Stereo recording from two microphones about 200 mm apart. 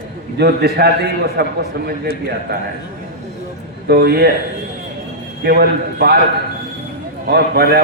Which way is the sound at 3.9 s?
50° right (ahead or behind).